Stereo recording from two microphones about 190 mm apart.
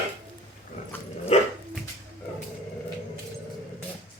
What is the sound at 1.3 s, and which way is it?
Dog, 35° left (ahead or behind).